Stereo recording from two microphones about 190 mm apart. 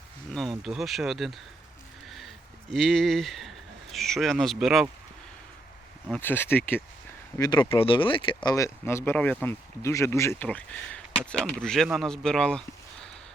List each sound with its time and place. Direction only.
0.6 s speech: centre (ahead or behind)
2.0 s a sound: centre (ahead or behind)
2.7 s speech: centre (ahead or behind)
6.1 s speech: 10° left (ahead or behind)
7.3 s speech: 20° left (ahead or behind)
8.4 s speech: 15° left (ahead or behind)